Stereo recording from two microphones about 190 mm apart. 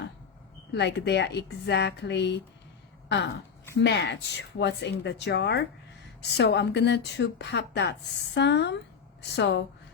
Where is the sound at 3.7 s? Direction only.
65° left (ahead or behind).